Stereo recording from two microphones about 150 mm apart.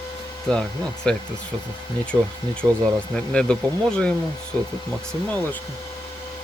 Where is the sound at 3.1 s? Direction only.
5° left (ahead or behind).